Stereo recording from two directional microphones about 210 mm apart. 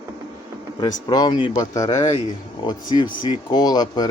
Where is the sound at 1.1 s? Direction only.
20° left (ahead or behind).